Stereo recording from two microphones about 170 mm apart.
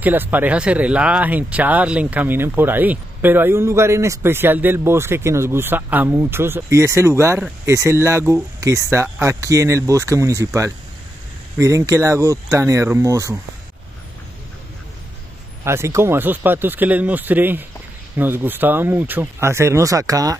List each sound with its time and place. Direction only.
0.0 s speech: 10° right (ahead or behind)
15.6 s speech: 15° right (ahead or behind)